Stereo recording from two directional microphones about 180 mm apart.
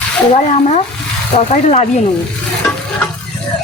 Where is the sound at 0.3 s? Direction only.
40° left (ahead or behind).